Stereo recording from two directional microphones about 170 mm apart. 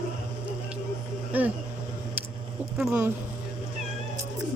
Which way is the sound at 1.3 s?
10° right (ahead or behind).